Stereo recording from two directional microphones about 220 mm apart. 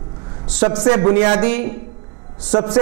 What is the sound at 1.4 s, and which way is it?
Speech, 10° right (ahead or behind).